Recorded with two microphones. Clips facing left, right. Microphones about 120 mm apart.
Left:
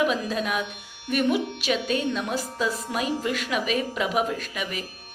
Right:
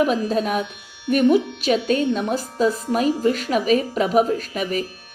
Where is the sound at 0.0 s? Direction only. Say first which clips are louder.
Right 5 dB; 40° right (ahead or behind).